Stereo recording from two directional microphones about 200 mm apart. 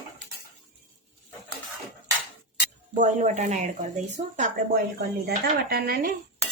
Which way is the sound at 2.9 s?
35° right (ahead or behind).